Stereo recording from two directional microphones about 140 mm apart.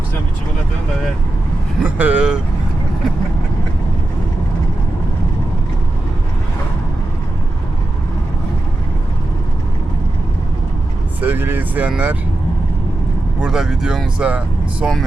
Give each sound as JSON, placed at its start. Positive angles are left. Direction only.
{"t": 1.8, "sound": "speech", "side_deg": -10}
{"t": 11.2, "sound": "vehicle", "side_deg": -15}
{"t": 13.4, "sound": "speech", "side_deg": -5}